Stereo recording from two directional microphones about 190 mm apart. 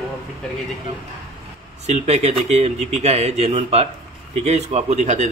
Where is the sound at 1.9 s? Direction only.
35° right (ahead or behind).